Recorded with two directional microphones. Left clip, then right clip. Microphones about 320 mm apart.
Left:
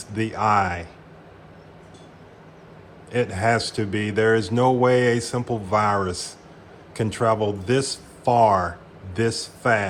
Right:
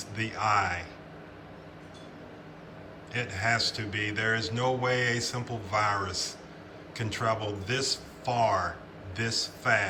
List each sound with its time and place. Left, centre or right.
0.1 s speech: centre
3.1 s speech: centre